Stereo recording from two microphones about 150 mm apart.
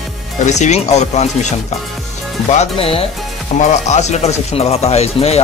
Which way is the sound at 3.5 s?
50° left (ahead or behind).